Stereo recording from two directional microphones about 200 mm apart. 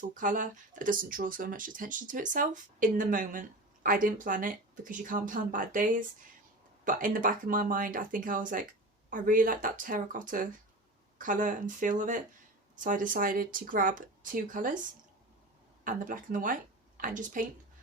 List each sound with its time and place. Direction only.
0.2 s speech: 40° right (ahead or behind)
15.8 s speech: 40° right (ahead or behind)